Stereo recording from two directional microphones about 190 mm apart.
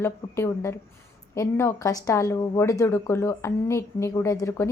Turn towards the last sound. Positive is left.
turn(degrees=15)  # may be behind; listen again after turning